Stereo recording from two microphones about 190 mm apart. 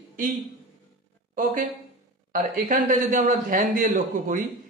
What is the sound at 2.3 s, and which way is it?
A man's voice, 45° right (ahead or behind).